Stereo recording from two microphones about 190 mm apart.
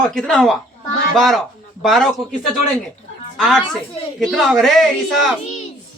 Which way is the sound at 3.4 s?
Centre (ahead or behind).